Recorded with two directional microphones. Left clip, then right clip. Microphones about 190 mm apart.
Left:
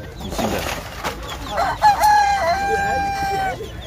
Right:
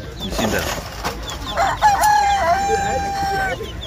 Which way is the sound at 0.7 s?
35° right (ahead or behind).